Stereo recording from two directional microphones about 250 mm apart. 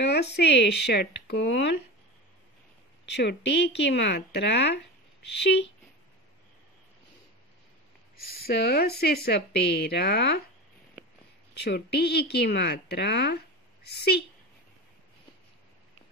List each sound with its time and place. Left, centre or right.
0.0 s speech: left
3.1 s speech: left
8.2 s speech: left
11.5 s speech: left